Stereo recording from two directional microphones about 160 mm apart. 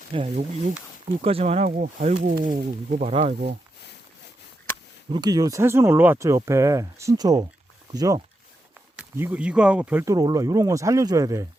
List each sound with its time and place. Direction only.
0.1 s speech: 35° right (ahead or behind); by 3.1 s 55° right (ahead or behind)
3.1 s speech: 40° right (ahead or behind)
5.1 s speech: 25° right (ahead or behind)